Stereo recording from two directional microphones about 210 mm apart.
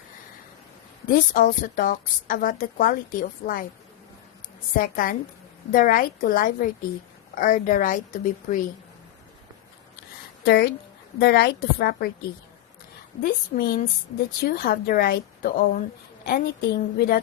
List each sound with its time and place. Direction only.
1.0 s a woman's voice: 40° left (ahead or behind)
4.7 s a woman's voice: 40° left (ahead or behind)
10.4 s a woman's voice: 50° left (ahead or behind)
13.2 s a woman's voice: 45° left (ahead or behind)